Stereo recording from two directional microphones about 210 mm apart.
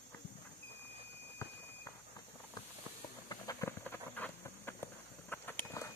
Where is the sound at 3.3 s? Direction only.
15° left (ahead or behind).